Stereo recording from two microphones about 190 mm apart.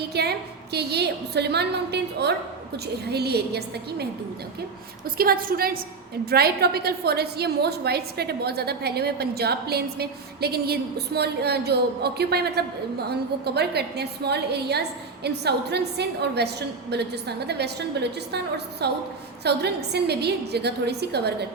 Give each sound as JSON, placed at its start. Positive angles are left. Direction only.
{"t": 0.1, "sound": "a woman's voice", "side_deg": -60}
{"t": 5.0, "sound": "a woman's voice", "side_deg": -50}